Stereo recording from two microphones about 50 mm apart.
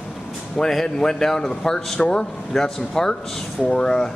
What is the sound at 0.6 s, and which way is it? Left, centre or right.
Speech, centre.